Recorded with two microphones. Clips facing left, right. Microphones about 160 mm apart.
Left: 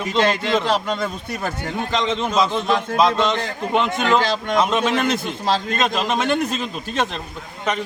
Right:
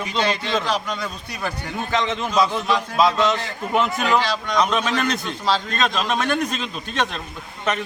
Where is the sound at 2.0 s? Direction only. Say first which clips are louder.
Even; 20° left (ahead or behind).